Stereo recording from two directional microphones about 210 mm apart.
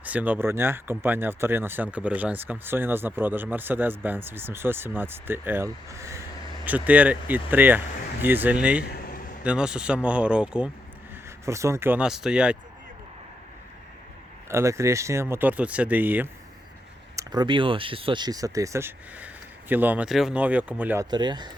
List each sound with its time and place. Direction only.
0.0 s speech: 5° right (ahead or behind)
8.8 s a sound: 45° left (ahead or behind)
9.4 s speech: 5° right (ahead or behind)
14.5 s speech: 15° right (ahead or behind)
17.2 s speech: 20° right (ahead or behind)